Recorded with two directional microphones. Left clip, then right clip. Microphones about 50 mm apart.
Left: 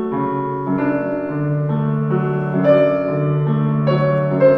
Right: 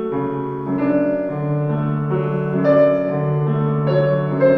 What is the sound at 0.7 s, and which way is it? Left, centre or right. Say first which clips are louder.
Music: right 2 dB; centre.